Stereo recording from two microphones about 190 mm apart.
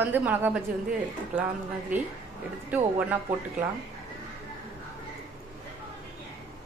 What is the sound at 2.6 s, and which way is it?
Speech, 10° right (ahead or behind).